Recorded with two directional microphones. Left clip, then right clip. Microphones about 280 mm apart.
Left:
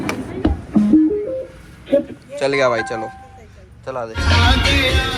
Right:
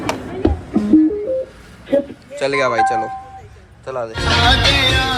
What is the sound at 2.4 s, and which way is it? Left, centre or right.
Speech, centre.